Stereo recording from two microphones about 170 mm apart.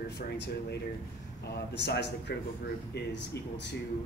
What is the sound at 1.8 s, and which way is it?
Speech, 85° left.